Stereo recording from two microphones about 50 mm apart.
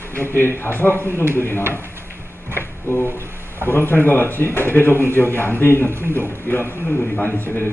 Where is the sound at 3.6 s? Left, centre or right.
Left.